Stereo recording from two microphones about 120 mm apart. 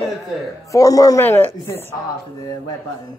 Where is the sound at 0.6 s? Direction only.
30° left (ahead or behind).